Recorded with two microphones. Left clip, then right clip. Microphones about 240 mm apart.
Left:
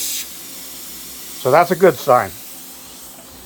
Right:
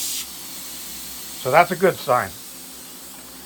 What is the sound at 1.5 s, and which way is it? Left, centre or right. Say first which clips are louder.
Speech: left 4 dB; left.